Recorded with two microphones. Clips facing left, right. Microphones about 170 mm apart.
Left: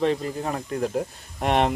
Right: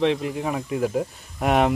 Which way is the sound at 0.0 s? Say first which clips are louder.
Right 2 dB; centre (ahead or behind).